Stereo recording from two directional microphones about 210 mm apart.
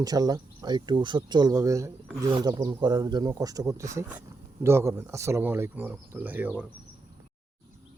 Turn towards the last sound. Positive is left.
turn(degrees=-10)  # may be behind; listen again after turning